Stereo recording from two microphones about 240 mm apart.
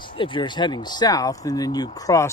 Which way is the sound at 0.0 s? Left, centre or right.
Left.